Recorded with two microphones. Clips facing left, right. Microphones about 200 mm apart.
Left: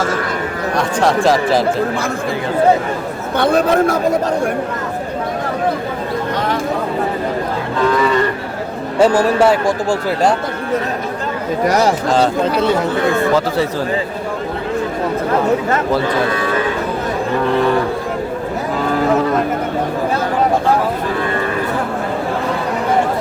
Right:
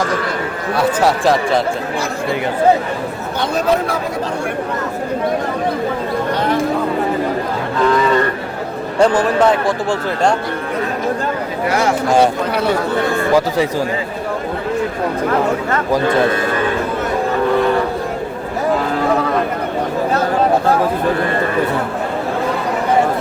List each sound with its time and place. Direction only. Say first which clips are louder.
0.8 s speech: even; 5° right (ahead or behind)
9.0 s a man's voice: left 1 dB; 10° left (ahead or behind)
11.6 s speech: left 3 dB; 40° left (ahead or behind)